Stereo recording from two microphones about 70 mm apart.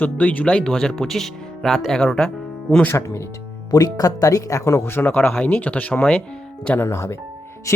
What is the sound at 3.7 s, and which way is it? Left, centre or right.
Speech, left.